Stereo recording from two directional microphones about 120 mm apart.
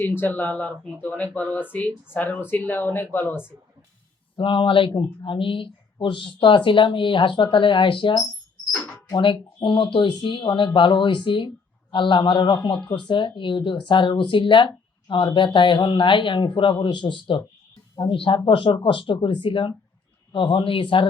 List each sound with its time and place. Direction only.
0.0 s speech: 20° left (ahead or behind)
4.4 s speech: 45° left (ahead or behind)